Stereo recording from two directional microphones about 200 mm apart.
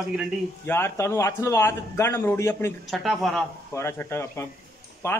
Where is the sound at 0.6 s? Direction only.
10° left (ahead or behind).